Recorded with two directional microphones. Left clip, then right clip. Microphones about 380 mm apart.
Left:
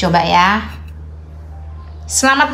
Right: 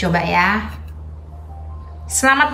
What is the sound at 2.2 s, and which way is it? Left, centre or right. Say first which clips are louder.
Speech: left 2 dB; centre.